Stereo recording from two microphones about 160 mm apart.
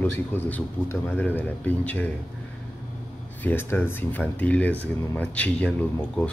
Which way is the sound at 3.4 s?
15° left (ahead or behind).